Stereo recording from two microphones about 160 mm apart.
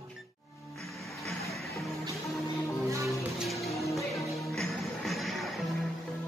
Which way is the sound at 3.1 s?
Centre (ahead or behind).